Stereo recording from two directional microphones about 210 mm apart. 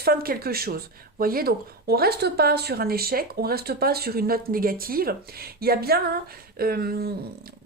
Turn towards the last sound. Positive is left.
turn(degrees=-45)  # may be behind; listen again after turning